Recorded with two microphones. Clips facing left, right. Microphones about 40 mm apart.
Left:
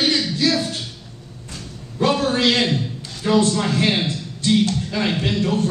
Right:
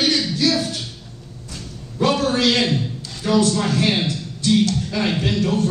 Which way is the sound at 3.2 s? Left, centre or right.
Left.